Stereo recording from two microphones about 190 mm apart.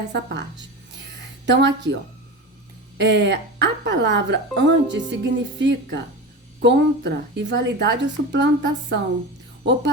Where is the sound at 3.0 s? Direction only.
65° right (ahead or behind).